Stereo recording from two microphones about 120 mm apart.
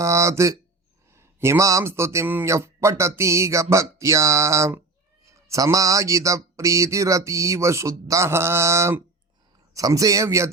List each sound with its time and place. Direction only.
0.0 s speech: 25° right (ahead or behind)